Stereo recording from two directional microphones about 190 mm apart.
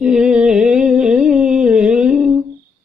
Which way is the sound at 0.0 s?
5° right (ahead or behind).